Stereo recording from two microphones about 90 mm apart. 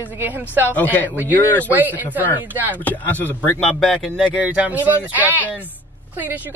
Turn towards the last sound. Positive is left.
turn(degrees=-20)  # may be behind; listen again after turning